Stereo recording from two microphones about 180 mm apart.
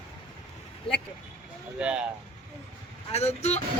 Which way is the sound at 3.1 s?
35° left (ahead or behind).